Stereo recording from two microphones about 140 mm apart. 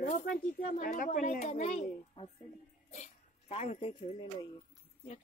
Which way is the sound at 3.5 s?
50° left (ahead or behind).